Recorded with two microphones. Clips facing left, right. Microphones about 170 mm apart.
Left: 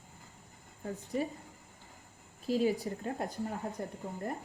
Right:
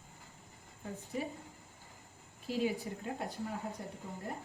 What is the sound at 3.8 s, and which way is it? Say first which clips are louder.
Speech: left 5 dB; 55° left (ahead or behind).